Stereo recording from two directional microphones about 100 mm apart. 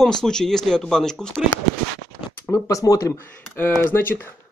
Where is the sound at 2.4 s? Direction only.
35° left (ahead or behind).